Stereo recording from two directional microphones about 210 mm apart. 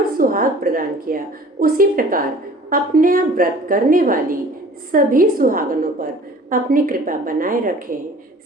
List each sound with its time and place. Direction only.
0.2 s a woman's voice: 40° right (ahead or behind)